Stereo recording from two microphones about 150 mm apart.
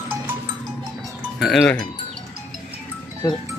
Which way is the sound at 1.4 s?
Centre (ahead or behind).